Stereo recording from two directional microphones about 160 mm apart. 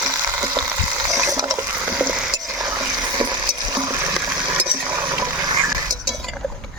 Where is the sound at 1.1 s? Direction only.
20° right (ahead or behind).